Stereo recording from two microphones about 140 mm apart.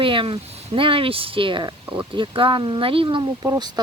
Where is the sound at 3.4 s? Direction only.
25° right (ahead or behind).